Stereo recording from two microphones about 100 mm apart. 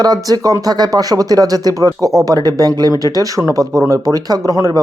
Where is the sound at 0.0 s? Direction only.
40° right (ahead or behind).